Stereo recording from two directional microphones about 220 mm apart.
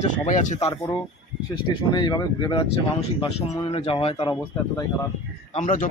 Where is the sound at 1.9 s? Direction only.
20° left (ahead or behind).